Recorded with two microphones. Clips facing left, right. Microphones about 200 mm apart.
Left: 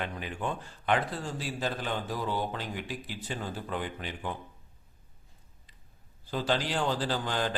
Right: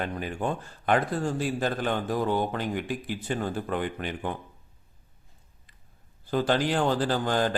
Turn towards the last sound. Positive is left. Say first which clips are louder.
# right 5 dB
turn(degrees=-45)  # may be behind; listen again after turning